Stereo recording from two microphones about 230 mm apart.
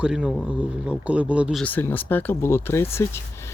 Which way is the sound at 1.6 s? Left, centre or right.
Centre.